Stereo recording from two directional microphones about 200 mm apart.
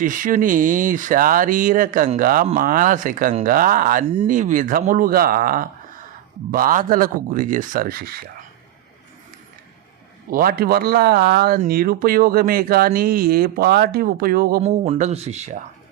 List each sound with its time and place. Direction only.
0.0 s speech: 40° right (ahead or behind)
10.3 s speech: 50° right (ahead or behind)
14.6 s speech: 35° right (ahead or behind)